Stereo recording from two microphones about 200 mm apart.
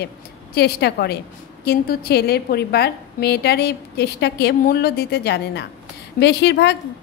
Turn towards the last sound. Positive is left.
turn(degrees=60)  # may be behind; listen again after turning